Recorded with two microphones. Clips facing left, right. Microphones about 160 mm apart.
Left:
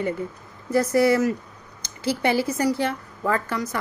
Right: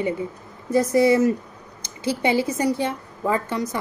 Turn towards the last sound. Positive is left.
turn(degrees=-20)  # may be behind; listen again after turning